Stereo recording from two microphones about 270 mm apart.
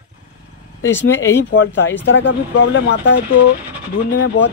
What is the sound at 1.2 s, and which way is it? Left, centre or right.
Speech, centre.